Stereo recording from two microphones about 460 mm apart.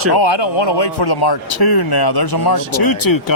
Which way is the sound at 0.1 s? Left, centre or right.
Left.